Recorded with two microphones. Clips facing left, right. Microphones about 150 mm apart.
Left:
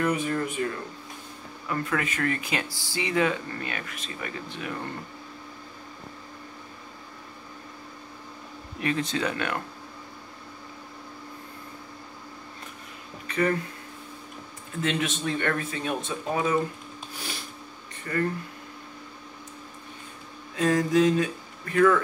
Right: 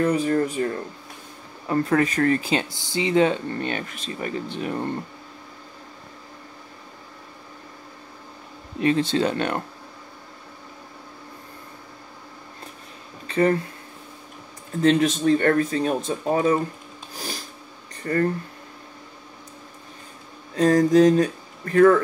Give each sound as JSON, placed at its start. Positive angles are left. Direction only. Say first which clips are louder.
{"t": 0.0, "sound": "speech", "louder": "right 6 dB", "side_deg": -35}
{"t": 8.7, "sound": "speech", "louder": "right 7 dB", "side_deg": -30}
{"t": 13.3, "sound": "speech", "louder": "right 5 dB", "side_deg": -30}
{"t": 14.8, "sound": "speech", "louder": "right 9 dB", "side_deg": -40}
{"t": 18.0, "sound": "speech", "louder": "right 5 dB", "side_deg": -40}
{"t": 20.5, "sound": "speech", "louder": "right 6 dB", "side_deg": -40}